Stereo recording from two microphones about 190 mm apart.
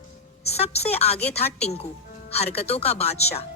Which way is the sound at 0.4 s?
35° left (ahead or behind).